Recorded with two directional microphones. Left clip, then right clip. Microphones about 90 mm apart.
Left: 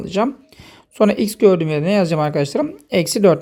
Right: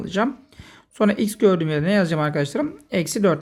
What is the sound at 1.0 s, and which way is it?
Speech, 45° left (ahead or behind).